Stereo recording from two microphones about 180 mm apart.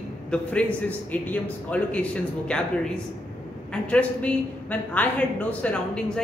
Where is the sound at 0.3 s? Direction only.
5° left (ahead or behind).